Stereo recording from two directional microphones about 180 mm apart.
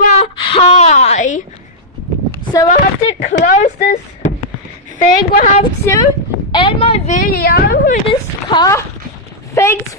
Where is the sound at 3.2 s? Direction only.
45° left (ahead or behind).